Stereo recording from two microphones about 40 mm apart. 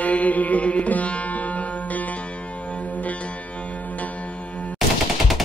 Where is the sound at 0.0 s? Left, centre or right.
Left.